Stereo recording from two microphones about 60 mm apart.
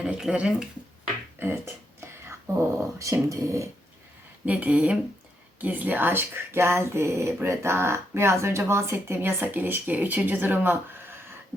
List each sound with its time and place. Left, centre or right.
0.0 s speech: centre
1.4 s speech: right
4.4 s speech: right